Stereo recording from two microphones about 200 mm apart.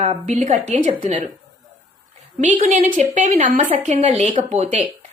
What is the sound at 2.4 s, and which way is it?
A woman's voice, 35° right (ahead or behind).